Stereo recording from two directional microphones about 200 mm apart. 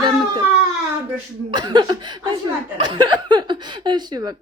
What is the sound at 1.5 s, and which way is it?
Speech, 20° right (ahead or behind).